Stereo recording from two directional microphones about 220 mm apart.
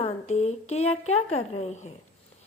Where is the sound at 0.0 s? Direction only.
30° left (ahead or behind).